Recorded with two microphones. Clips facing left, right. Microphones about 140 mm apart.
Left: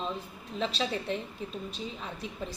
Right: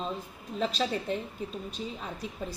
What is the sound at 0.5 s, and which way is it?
A woman's voice, 40° right (ahead or behind).